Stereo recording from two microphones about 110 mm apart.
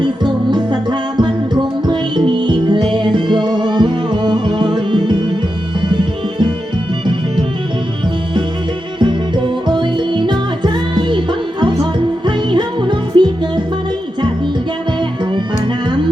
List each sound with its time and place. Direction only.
0.0 s music: 45° right (ahead or behind)
9.0 s music: 45° right (ahead or behind)